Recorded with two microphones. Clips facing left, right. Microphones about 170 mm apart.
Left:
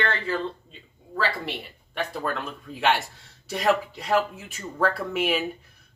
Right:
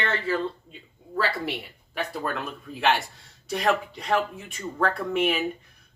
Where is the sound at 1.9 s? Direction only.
Centre (ahead or behind).